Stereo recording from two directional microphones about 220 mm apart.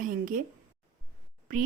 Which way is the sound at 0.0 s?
40° right (ahead or behind).